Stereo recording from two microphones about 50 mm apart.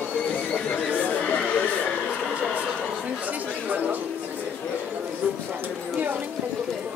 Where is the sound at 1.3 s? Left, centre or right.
Left.